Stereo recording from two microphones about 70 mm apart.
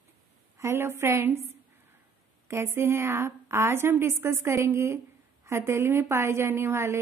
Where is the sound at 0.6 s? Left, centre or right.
Right.